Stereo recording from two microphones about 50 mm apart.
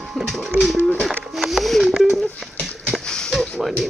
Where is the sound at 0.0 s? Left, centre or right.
Centre.